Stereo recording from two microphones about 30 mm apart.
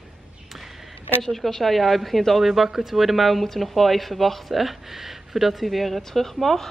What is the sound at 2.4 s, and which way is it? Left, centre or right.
Speech, centre.